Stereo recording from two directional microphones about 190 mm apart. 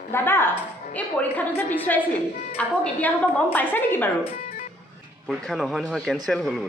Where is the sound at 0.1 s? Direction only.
10° left (ahead or behind).